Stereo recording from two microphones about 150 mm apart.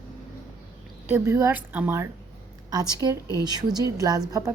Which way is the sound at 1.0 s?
15° right (ahead or behind).